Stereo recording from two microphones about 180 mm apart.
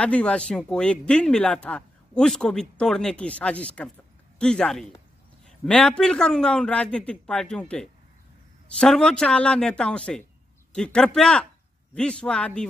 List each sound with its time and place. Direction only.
0.0 s a man's voice: 5° left (ahead or behind)